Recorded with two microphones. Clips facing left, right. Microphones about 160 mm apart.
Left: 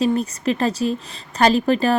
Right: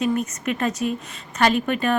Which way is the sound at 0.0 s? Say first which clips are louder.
Left 3 dB; 30° left (ahead or behind).